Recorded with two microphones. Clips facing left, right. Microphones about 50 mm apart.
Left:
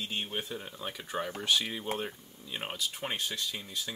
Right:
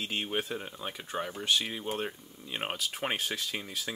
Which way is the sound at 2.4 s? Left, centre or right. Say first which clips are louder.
Right 2 dB; right.